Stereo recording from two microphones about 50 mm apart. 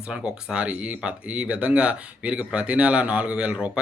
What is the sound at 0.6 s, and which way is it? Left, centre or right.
Speech, right.